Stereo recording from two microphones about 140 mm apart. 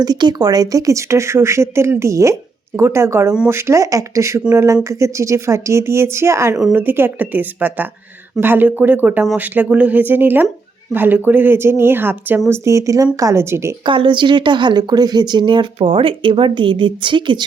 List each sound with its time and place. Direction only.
0.0 s a woman's voice: 30° right (ahead or behind)
13.8 s speech: 35° right (ahead or behind)